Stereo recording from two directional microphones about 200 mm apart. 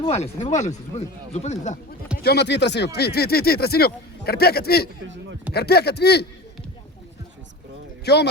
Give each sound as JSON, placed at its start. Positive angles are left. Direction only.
{"t": 0.0, "sound": "speech", "side_deg": 30}
{"t": 2.2, "sound": "speech", "side_deg": 55}
{"t": 8.0, "sound": "a man's voice", "side_deg": 55}